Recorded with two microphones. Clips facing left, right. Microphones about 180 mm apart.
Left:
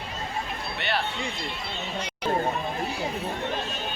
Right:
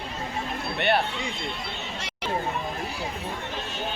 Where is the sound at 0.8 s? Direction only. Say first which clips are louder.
Right 6 dB; 55° right (ahead or behind).